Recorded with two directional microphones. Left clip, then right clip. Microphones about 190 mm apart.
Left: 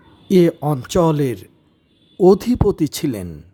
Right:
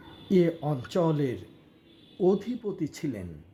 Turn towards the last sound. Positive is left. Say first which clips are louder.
# left 12 dB
turn(degrees=40)  # may be behind; listen again after turning